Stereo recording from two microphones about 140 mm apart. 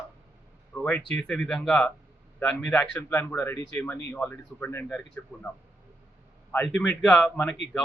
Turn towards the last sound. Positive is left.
turn(degrees=10)  # may be behind; listen again after turning